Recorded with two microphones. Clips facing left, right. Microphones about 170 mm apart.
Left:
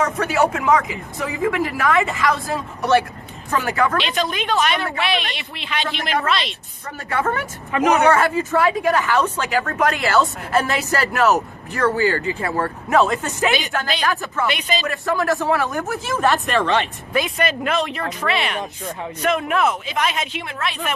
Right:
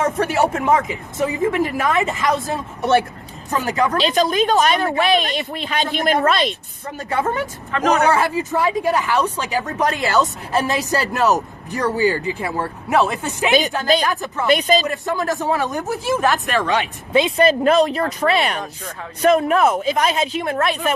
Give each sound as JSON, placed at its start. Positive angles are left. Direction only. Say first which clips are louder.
{"t": 0.2, "sound": "speech", "louder": "right 1 dB", "side_deg": -35}
{"t": 0.8, "sound": "speech", "louder": "right 4 dB", "side_deg": -20}
{"t": 3.9, "sound": "speech", "louder": "right 5 dB", "side_deg": -40}
{"t": 7.1, "sound": "speech", "louder": "right 1 dB", "side_deg": -15}
{"t": 7.7, "sound": "speech", "louder": "left 1 dB", "side_deg": 15}
{"t": 8.1, "sound": "speech", "louder": "left 1 dB", "side_deg": -15}
{"t": 14.4, "sound": "speech", "louder": "right 8 dB", "side_deg": -40}
{"t": 14.8, "sound": "speech", "louder": "left 1 dB", "side_deg": -20}
{"t": 16.2, "sound": "speech", "louder": "left 5 dB", "side_deg": 0}
{"t": 17.1, "sound": "speech", "louder": "right 8 dB", "side_deg": -25}